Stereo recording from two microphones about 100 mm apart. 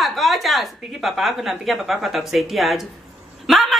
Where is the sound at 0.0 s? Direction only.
Centre (ahead or behind).